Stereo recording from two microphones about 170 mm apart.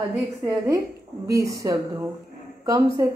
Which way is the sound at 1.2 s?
20° right (ahead or behind).